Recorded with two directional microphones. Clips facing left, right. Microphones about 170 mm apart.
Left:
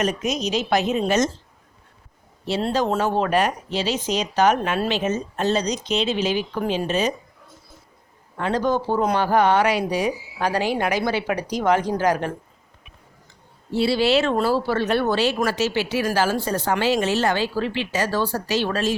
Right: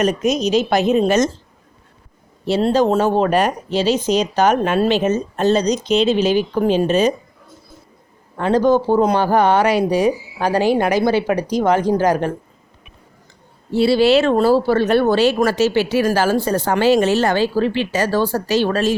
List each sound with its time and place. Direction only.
0.0 s speech: 45° right (ahead or behind)
2.6 s speech: 30° right (ahead or behind)
8.4 s speech: 35° right (ahead or behind)
13.7 s speech: 45° right (ahead or behind)